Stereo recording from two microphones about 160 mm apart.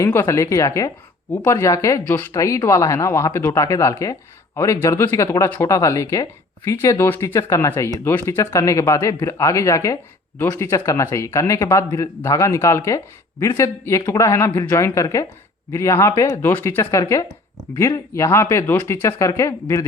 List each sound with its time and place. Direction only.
0.0 s speech: 15° left (ahead or behind)